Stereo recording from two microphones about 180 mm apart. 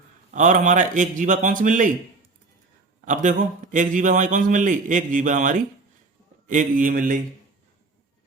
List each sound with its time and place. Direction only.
0.3 s a man's voice: 45° right (ahead or behind)
3.1 s a man's voice: 45° right (ahead or behind)